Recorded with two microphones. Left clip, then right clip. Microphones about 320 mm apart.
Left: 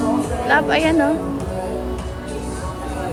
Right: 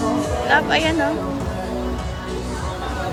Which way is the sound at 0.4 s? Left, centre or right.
Centre.